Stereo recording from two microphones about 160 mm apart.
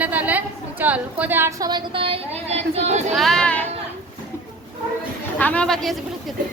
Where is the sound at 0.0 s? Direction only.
10° right (ahead or behind); by 3.2 s 45° right (ahead or behind).